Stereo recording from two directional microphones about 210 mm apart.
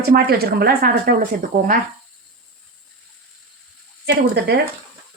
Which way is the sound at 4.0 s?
50° right (ahead or behind).